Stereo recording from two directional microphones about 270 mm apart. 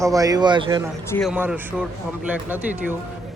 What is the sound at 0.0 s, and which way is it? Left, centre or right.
Speech, centre.